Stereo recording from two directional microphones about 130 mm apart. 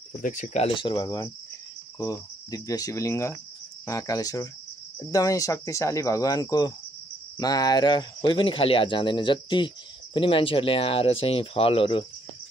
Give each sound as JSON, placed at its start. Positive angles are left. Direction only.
{"t": 0.1, "sound": "speech", "side_deg": 80}
{"t": 0.7, "sound": "speech", "side_deg": 35}